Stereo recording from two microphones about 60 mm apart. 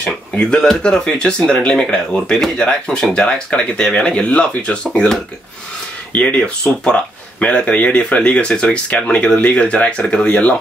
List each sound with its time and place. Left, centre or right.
0.0 s speech: centre